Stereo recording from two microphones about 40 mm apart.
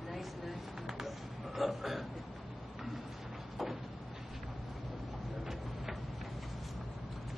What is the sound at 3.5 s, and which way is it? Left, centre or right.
Cupboard open or close, centre.